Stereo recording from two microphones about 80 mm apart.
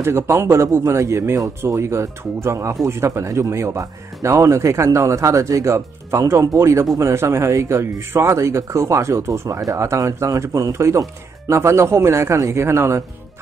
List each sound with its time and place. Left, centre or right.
0.0 s speech: right